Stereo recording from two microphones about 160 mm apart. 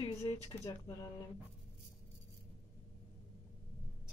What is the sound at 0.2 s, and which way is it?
Speech, 25° left (ahead or behind).